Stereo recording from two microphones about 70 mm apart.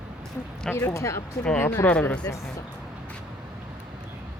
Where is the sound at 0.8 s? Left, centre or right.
Left.